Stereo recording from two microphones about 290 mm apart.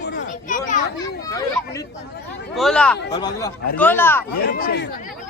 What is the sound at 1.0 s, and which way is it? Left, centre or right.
Speech, centre.